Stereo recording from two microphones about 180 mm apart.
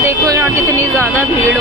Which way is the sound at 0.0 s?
15° right (ahead or behind).